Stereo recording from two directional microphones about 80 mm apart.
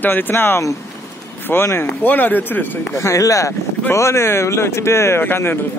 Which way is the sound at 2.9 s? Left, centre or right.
Left.